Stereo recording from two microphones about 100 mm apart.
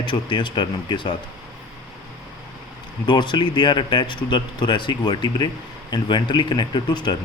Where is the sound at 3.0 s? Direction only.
50° left (ahead or behind).